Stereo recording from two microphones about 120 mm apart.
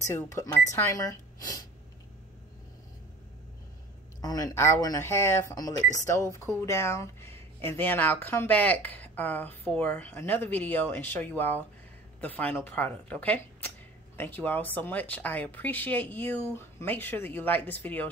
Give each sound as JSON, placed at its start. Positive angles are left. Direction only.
{"t": 0.0, "sound": "speech", "side_deg": 20}
{"t": 4.2, "sound": "speech", "side_deg": 30}